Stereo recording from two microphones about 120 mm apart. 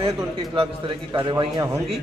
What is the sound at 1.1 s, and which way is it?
Speech, 20° right (ahead or behind).